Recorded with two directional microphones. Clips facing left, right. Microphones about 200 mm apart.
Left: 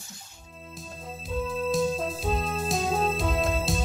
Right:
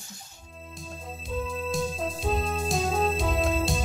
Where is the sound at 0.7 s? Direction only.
Centre (ahead or behind).